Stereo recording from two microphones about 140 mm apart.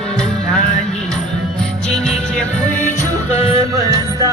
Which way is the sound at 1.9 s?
5° left (ahead or behind).